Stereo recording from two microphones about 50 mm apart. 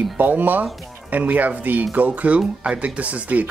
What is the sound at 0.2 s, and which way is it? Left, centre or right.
Speech, right.